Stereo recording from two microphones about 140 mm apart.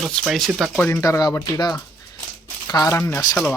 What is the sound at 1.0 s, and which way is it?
Speech, 25° left (ahead or behind).